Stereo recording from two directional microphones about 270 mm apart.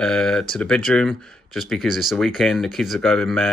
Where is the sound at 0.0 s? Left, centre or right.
Centre.